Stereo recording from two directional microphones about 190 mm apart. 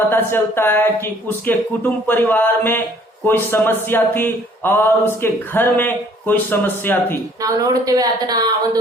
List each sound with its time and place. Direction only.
0.1 s speech: 10° left (ahead or behind)
7.4 s a woman's voice: 20° right (ahead or behind)